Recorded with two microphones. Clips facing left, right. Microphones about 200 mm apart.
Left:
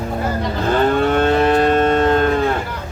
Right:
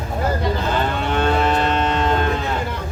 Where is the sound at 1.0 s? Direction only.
50° left (ahead or behind).